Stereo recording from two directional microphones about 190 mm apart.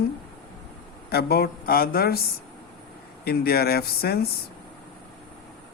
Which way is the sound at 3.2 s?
55° left (ahead or behind).